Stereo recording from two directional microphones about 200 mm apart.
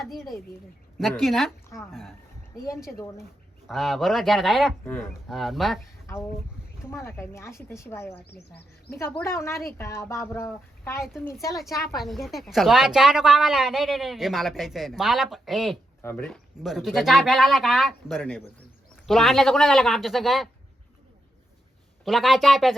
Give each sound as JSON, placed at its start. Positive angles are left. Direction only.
{"t": 0.0, "sound": "a woman's voice", "side_deg": 0}
{"t": 3.7, "sound": "a woman's voice", "side_deg": 0}
{"t": 6.9, "sound": "speech", "side_deg": 10}
{"t": 8.3, "sound": "speech", "side_deg": 55}
{"t": 8.9, "sound": "speech", "side_deg": 10}
{"t": 11.0, "sound": "a woman's voice", "side_deg": 0}
{"t": 22.0, "sound": "a woman's voice", "side_deg": 0}